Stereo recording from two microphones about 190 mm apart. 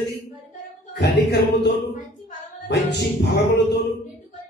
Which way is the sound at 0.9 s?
65° left (ahead or behind).